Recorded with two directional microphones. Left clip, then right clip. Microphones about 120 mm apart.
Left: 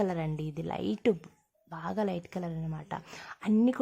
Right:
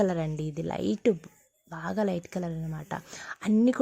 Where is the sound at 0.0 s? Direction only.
30° right (ahead or behind).